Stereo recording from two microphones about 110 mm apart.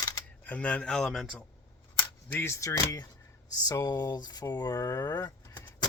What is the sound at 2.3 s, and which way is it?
Speech, 20° left (ahead or behind).